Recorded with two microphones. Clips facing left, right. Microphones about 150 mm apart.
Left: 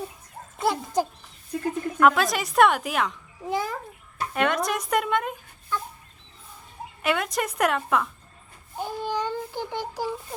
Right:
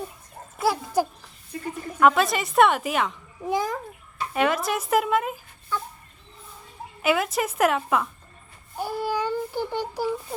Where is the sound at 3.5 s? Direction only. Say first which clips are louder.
Right 2 dB; 15° right (ahead or behind).